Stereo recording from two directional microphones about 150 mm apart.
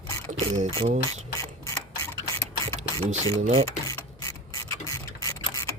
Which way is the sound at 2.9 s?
20° left (ahead or behind).